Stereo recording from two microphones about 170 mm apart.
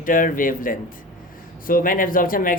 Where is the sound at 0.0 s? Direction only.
50° left (ahead or behind).